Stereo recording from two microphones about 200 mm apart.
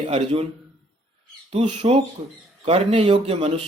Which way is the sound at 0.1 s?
30° right (ahead or behind).